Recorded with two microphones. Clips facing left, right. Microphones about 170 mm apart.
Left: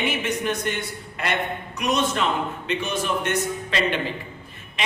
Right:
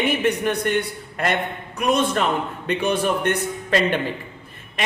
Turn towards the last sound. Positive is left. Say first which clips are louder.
# right 4 dB
turn(degrees=-45)  # may be behind; listen again after turning